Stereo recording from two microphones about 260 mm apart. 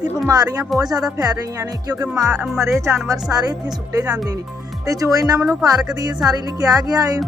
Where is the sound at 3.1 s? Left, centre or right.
Centre.